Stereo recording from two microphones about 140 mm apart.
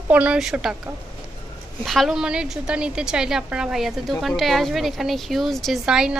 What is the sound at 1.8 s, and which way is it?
A woman's voice, centre (ahead or behind).